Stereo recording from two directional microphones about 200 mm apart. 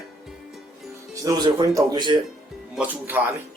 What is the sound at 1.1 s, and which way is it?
Speech, 15° right (ahead or behind).